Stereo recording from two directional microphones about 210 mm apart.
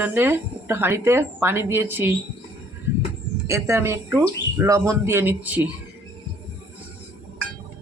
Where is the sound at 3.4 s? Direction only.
15° right (ahead or behind).